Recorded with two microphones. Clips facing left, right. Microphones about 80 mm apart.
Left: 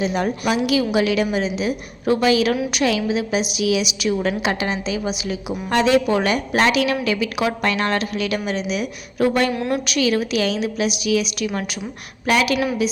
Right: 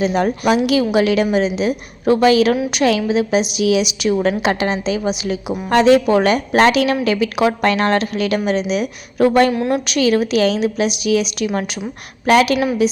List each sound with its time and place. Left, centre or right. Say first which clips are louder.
0.0 s a woman's voice: right 4 dB; right
9.5 s a woman's voice: right 4 dB; right